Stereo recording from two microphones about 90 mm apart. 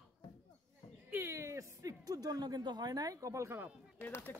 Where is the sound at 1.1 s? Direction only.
30° right (ahead or behind).